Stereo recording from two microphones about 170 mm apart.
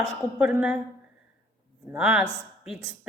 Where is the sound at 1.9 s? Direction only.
10° right (ahead or behind).